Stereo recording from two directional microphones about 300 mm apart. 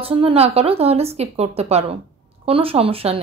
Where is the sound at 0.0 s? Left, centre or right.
Centre.